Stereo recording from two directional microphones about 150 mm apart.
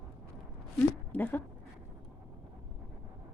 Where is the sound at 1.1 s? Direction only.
10° left (ahead or behind).